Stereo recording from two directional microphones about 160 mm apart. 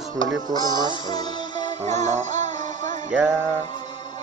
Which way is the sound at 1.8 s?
45° right (ahead or behind).